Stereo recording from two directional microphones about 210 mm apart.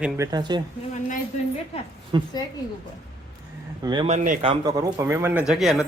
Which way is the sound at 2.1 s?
20° right (ahead or behind).